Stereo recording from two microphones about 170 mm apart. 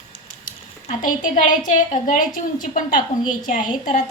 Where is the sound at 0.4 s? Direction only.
50° left (ahead or behind).